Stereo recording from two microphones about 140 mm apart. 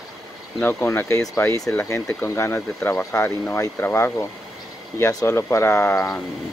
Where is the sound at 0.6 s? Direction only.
15° left (ahead or behind).